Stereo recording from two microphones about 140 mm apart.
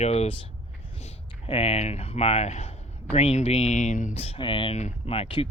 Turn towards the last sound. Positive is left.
turn(degrees=40)  # may be behind; listen again after turning